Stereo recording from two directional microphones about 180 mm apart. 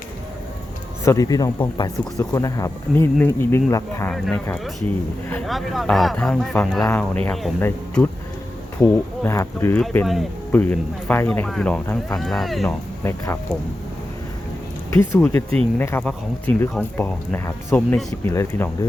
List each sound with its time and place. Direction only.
1.0 s speech: 20° left (ahead or behind)
5.3 s speech: centre (ahead or behind)
13.1 s speech: 15° left (ahead or behind)
14.8 s speech: 15° left (ahead or behind)